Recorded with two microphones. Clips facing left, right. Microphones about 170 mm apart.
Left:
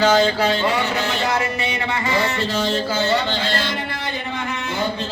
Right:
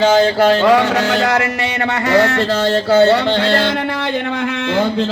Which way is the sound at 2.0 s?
80° right.